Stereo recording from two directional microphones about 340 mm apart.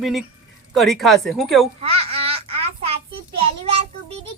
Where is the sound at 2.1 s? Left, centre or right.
Centre.